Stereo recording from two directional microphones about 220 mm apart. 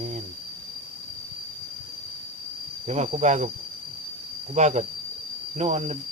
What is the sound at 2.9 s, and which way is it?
Speech, 30° right (ahead or behind).